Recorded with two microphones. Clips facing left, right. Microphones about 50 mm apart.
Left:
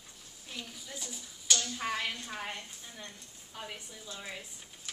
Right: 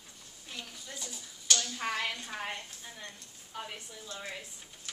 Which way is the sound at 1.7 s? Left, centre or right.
Centre.